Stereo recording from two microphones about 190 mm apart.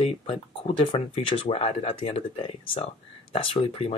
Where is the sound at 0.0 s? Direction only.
30° left (ahead or behind).